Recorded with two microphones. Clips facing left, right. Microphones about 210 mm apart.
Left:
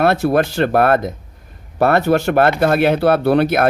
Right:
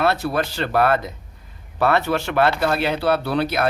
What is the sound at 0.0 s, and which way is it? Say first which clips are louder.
Speech: left 6 dB; 50° left (ahead or behind).